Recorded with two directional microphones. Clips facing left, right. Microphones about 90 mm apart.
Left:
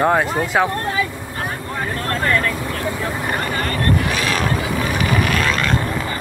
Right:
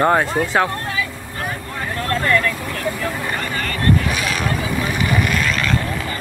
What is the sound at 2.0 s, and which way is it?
Vehicle, 30° left (ahead or behind).